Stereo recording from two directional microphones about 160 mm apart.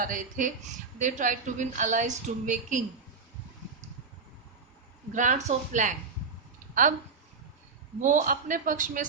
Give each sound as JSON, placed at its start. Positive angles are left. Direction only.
{"t": 0.0, "sound": "a woman's voice", "side_deg": -55}
{"t": 5.1, "sound": "a woman's voice", "side_deg": -50}
{"t": 7.9, "sound": "a woman's voice", "side_deg": -50}